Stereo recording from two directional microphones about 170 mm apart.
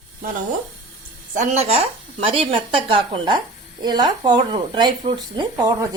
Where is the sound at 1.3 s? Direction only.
45° right (ahead or behind).